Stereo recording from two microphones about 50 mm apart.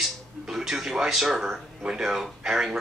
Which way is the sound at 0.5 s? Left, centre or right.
Centre.